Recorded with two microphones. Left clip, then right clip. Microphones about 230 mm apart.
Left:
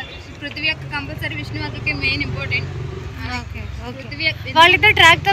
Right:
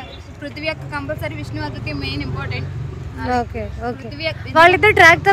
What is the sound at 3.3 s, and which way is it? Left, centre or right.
Speech, right.